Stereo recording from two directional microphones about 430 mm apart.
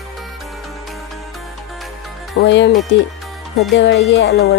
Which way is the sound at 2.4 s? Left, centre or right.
Left.